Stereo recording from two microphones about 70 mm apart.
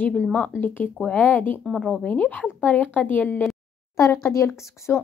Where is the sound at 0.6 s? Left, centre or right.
Left.